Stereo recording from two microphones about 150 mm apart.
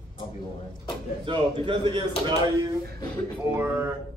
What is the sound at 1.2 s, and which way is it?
Speech, 35° right (ahead or behind).